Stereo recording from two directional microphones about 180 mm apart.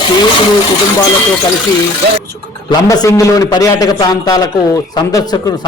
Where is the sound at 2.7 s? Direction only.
20° left (ahead or behind).